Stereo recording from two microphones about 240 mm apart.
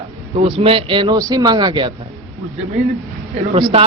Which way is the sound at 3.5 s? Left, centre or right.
Right.